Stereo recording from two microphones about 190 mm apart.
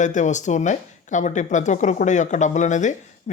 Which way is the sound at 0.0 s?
40° left (ahead or behind).